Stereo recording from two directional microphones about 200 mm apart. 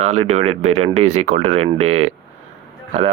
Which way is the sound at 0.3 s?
35° right (ahead or behind).